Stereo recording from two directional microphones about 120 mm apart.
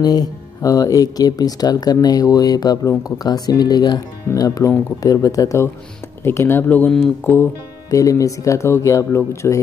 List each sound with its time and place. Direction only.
0.0 s speech: 35° left (ahead or behind); by 6.9 s 15° left (ahead or behind)
7.9 s speech: 25° left (ahead or behind)